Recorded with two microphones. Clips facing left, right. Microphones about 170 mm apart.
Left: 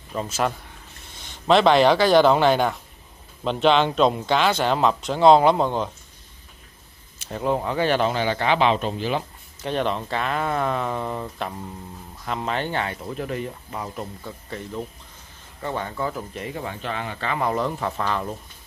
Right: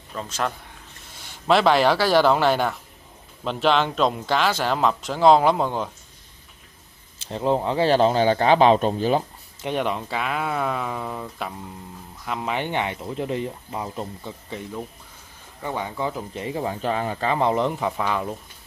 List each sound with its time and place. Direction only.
0.1 s speech: 10° left (ahead or behind)
1.5 s speech: 5° right (ahead or behind)
7.2 s speech: 25° right (ahead or behind); by 9.2 s 45° right (ahead or behind)
9.6 s speech: 15° right (ahead or behind)
15.6 s speech: 15° right (ahead or behind)
16.3 s speech: 30° right (ahead or behind); by 18.3 s 10° right (ahead or behind)